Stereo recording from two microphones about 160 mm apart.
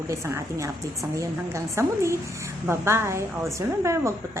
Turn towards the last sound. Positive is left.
turn(degrees=-20)  # may be behind; listen again after turning